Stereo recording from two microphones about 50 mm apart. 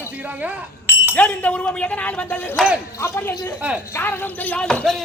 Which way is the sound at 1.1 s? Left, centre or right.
Left.